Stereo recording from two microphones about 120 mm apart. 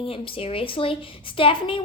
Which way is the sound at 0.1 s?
50° left (ahead or behind).